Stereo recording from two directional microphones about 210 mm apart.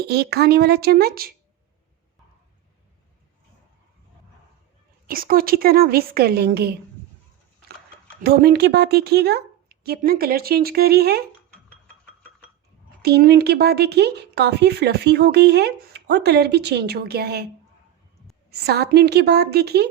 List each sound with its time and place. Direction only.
0.0 s speech: 50° right (ahead or behind)
5.0 s speech: 45° right (ahead or behind)
8.2 s speech: 50° right (ahead or behind)
13.0 s speech: 50° right (ahead or behind)
18.5 s speech: 50° right (ahead or behind)